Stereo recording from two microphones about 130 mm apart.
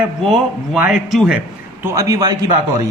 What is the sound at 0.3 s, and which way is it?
A man's voice, centre (ahead or behind).